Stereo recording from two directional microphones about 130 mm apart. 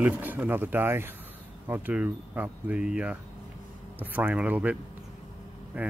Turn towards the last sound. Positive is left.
turn(degrees=-10)  # may be behind; listen again after turning